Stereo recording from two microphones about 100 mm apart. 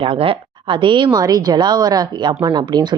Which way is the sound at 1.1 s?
40° right (ahead or behind).